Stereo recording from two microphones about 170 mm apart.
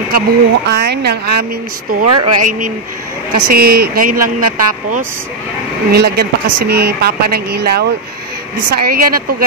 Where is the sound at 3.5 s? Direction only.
65° right (ahead or behind).